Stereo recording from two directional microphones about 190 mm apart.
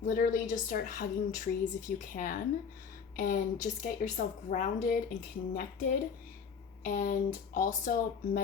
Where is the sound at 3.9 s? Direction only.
40° left (ahead or behind).